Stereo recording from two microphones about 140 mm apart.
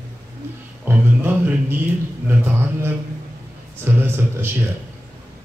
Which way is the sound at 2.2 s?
15° right (ahead or behind).